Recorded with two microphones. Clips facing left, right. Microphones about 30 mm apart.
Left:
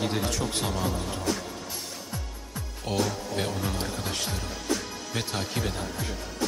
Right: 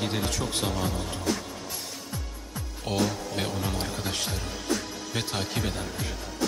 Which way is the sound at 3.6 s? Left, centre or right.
Centre.